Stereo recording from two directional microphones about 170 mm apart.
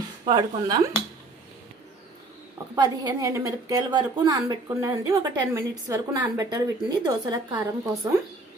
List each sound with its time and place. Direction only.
0.3 s a woman's voice: 25° right (ahead or behind)
2.7 s a woman's voice: 25° right (ahead or behind)